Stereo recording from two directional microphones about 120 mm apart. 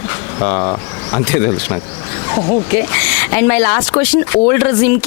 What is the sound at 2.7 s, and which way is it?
Speech, 20° left (ahead or behind).